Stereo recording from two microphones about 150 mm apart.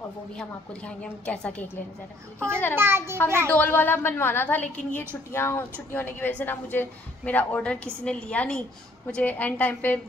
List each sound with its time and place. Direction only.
0.4 s a woman's voice: 5° left (ahead or behind)
2.7 s a child's voice: 15° right (ahead or behind)
3.5 s a woman's voice: 15° left (ahead or behind)